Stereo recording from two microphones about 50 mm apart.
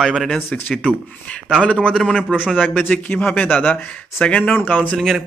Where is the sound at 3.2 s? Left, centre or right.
Left.